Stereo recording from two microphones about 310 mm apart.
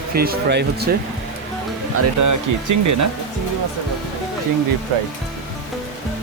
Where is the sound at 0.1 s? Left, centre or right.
Right.